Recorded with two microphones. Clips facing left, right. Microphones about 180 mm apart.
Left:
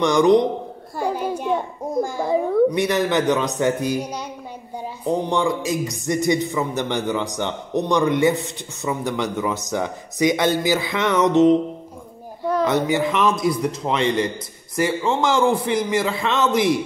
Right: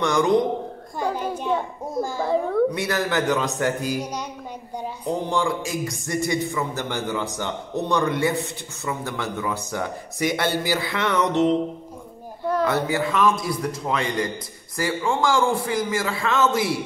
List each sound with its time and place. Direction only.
0.0 s a man's voice: 20° left (ahead or behind)
0.9 s a sound: 10° left (ahead or behind)
2.0 s a man's voice: 15° left (ahead or behind)
12.6 s a man's voice: 20° left (ahead or behind)